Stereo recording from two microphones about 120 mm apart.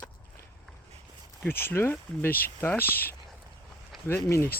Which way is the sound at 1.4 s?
20° left (ahead or behind).